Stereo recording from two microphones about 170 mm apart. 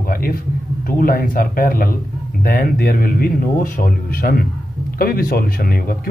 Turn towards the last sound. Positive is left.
turn(degrees=60)  # may be behind; listen again after turning